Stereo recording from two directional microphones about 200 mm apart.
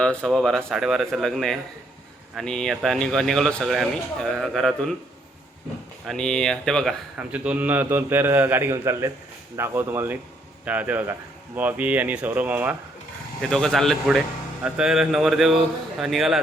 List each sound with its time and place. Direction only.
0.0 s a man's voice: 5° left (ahead or behind)
6.1 s speech: 5° left (ahead or behind)
13.4 s a man's voice: 5° left (ahead or behind)